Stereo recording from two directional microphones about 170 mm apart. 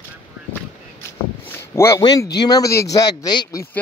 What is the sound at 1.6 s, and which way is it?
A man's voice, 15° left (ahead or behind).